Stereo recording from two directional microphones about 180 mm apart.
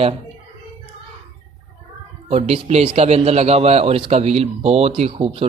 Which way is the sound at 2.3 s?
35° right (ahead or behind).